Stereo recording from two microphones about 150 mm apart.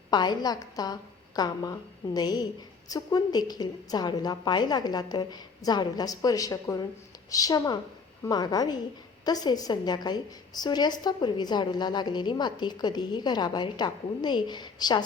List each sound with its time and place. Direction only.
0.1 s a woman's voice: 30° left (ahead or behind)